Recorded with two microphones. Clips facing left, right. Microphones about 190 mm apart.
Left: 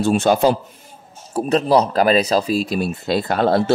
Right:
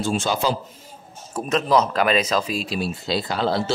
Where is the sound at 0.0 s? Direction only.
60° left (ahead or behind).